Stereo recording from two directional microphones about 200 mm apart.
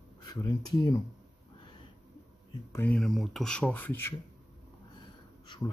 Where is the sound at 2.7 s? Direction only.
5° left (ahead or behind).